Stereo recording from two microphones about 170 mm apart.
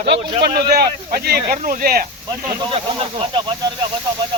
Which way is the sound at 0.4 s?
70° right (ahead or behind).